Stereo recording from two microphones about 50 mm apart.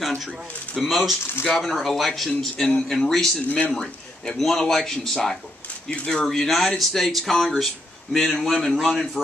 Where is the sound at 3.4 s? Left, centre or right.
Left.